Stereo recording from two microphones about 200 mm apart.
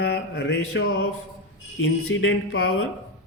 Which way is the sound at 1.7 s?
75° left (ahead or behind).